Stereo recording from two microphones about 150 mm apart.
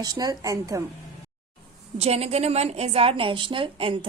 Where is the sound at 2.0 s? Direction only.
45° right (ahead or behind).